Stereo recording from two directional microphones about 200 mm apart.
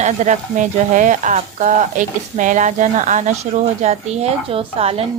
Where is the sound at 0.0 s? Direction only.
35° right (ahead or behind).